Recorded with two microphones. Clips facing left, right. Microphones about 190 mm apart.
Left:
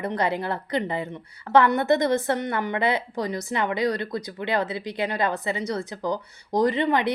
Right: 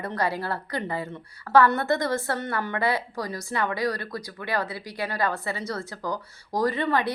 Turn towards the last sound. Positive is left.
turn(degrees=20)  # may be behind; listen again after turning